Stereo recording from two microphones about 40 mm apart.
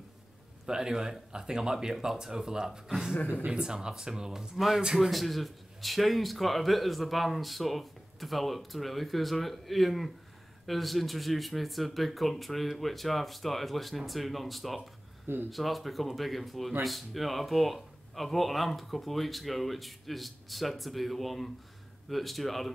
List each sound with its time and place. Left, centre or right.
0.7 s a man's voice: centre